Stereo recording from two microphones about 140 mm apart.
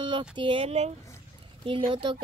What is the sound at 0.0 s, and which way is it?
Speech, 35° right (ahead or behind).